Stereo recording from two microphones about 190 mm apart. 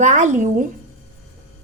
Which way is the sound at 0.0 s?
40° right (ahead or behind).